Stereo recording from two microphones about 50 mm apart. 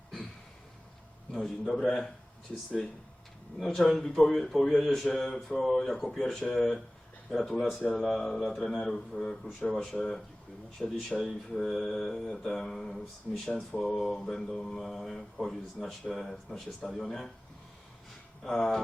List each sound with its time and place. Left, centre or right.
1.3 s a man's voice: centre
3.6 s a man's voice: centre